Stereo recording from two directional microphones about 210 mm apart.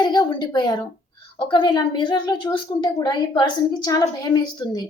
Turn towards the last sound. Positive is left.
turn(degrees=20)  # may be behind; listen again after turning